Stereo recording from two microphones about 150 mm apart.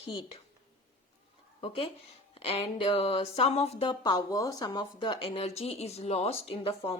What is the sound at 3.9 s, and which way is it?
A woman's voice, 30° left (ahead or behind).